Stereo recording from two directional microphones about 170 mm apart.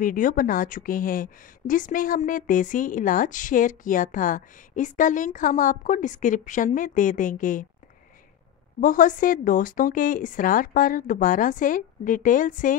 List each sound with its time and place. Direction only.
0.0 s speech: 55° left (ahead or behind)
8.8 s speech: 50° left (ahead or behind)